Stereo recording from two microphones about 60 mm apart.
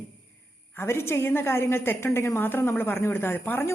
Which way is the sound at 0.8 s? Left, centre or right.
Left.